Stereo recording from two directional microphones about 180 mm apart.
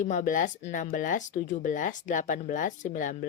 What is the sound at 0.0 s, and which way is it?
Speech, 45° left (ahead or behind).